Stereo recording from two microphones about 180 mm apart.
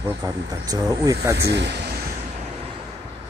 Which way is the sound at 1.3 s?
75° right (ahead or behind).